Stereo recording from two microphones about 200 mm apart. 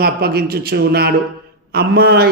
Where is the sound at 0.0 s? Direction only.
50° right (ahead or behind).